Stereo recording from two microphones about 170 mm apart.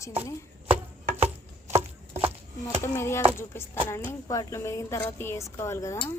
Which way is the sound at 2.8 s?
15° left (ahead or behind).